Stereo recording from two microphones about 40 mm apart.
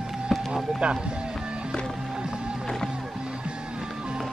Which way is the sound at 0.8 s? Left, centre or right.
Right.